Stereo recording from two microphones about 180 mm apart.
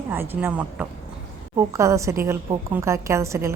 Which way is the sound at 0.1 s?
10° right (ahead or behind).